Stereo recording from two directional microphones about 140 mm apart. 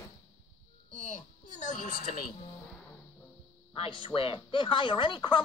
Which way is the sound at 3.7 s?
40° left (ahead or behind).